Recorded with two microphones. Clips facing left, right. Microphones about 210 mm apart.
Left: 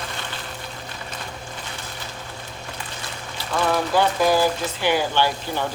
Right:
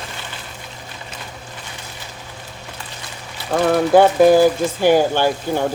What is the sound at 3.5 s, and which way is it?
Speech, 50° right (ahead or behind).